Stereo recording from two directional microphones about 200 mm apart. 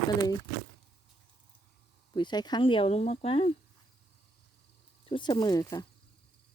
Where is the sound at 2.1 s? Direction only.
20° left (ahead or behind).